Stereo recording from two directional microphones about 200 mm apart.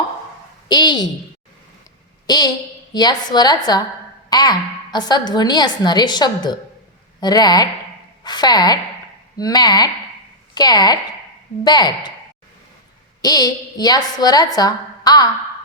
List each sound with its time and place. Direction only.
0.7 s a woman's voice: 20° left (ahead or behind)
2.2 s a woman's voice: 20° left (ahead or behind)
13.2 s a woman's voice: 20° left (ahead or behind)